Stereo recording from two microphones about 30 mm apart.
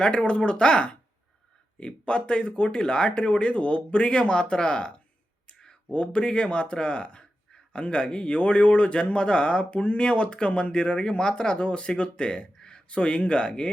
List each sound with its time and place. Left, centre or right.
0.0 s speech: left
12.5 s a sound: left
12.9 s speech: left